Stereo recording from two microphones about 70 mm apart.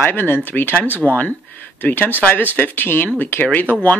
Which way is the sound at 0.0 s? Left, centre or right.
Left.